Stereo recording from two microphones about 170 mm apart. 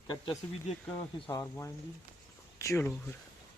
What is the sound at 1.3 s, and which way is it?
Speech, 15° left (ahead or behind).